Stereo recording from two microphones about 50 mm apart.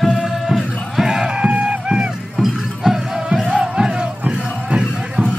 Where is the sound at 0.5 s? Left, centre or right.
Centre.